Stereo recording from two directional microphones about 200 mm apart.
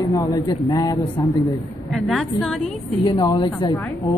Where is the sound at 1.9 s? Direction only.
5° left (ahead or behind).